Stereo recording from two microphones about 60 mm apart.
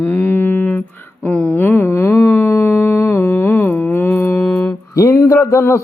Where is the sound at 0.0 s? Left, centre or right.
Left.